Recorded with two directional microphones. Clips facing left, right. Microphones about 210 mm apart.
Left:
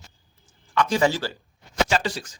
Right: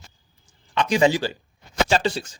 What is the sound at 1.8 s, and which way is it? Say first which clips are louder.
Speech: right 6 dB; 30° right (ahead or behind).